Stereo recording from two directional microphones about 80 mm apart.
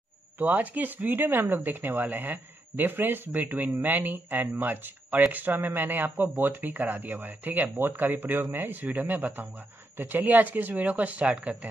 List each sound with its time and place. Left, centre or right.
0.4 s speech: right